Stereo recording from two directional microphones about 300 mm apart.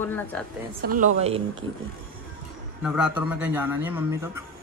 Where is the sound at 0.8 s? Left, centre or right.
Right.